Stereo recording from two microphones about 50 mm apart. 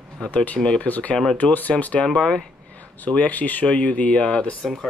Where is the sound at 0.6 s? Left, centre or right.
Centre.